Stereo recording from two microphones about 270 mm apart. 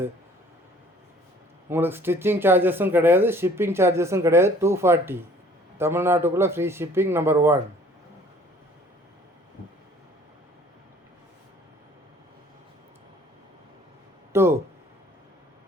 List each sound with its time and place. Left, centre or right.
1.7 s speech: centre
14.3 s speech: centre